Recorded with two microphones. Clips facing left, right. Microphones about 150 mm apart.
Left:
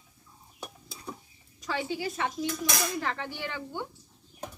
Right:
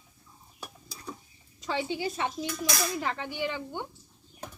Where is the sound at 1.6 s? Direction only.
20° right (ahead or behind).